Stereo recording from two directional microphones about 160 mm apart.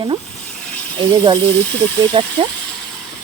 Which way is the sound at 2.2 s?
35° right (ahead or behind).